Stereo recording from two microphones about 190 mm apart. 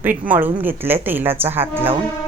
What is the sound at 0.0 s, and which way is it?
Speech, 10° right (ahead or behind).